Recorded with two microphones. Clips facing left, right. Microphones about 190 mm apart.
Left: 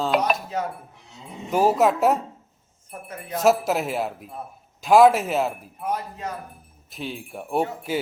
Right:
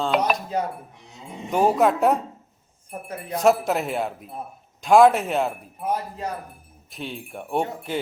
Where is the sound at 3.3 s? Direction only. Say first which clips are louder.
Even; centre (ahead or behind).